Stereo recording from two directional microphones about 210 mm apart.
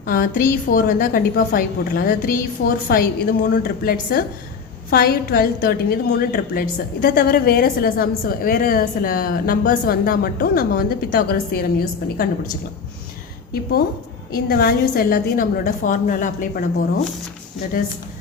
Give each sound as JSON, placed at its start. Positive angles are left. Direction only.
{"t": 0.0, "sound": "a woman's voice", "side_deg": 45}
{"t": 13.5, "sound": "a woman's voice", "side_deg": 45}